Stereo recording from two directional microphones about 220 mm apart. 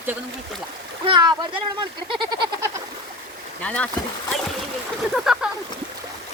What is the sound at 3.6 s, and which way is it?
Speech, 5° left (ahead or behind).